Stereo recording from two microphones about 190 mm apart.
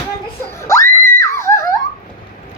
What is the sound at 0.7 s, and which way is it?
Screaming, 15° left (ahead or behind).